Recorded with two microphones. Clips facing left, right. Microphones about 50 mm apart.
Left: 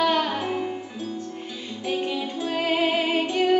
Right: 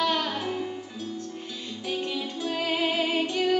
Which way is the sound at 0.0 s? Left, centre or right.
Centre.